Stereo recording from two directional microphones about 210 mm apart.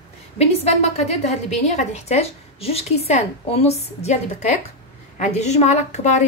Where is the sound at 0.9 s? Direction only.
30° left (ahead or behind).